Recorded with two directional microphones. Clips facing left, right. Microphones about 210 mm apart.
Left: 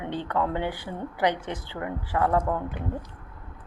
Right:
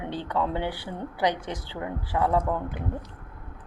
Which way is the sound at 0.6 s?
15° left (ahead or behind).